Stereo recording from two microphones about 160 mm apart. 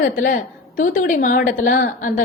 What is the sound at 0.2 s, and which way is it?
A woman's voice, 60° left (ahead or behind).